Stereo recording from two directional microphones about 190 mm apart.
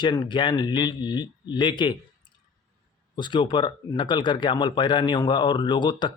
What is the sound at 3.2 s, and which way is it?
Speech, 25° left (ahead or behind).